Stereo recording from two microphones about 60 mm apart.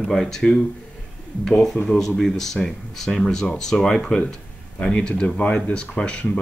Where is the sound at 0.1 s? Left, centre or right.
Centre.